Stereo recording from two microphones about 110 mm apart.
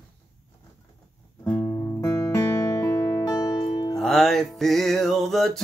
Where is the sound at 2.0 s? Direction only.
25° left (ahead or behind).